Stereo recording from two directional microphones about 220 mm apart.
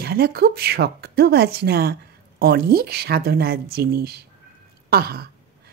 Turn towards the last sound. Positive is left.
turn(degrees=-45)  # may be behind; listen again after turning